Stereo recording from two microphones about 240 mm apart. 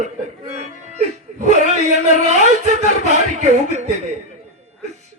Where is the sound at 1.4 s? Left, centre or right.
Right.